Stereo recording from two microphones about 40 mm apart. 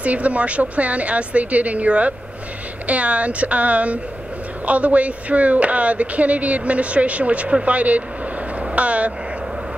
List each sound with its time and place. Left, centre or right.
0.0 s speech: right
8.7 s vehicle: right